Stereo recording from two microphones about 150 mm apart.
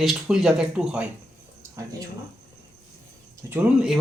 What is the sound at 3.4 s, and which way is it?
Speech, 10° right (ahead or behind).